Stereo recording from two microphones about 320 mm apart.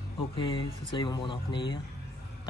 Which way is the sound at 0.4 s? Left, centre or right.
Centre.